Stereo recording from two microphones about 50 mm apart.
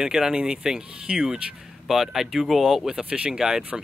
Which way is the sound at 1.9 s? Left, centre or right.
Centre.